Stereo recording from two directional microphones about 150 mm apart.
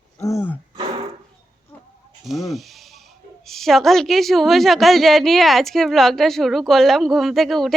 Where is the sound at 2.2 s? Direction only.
Centre (ahead or behind).